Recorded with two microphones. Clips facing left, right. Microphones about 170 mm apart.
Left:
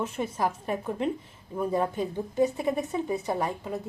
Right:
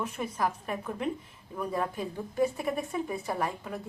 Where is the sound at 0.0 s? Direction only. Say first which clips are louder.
Left 3 dB; 25° left (ahead or behind).